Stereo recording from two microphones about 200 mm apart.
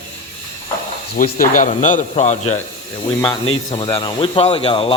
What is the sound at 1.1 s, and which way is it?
Speech, 40° left (ahead or behind).